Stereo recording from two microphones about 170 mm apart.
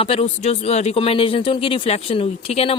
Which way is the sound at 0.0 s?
35° left (ahead or behind).